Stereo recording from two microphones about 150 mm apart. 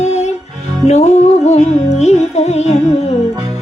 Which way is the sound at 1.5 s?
45° left (ahead or behind).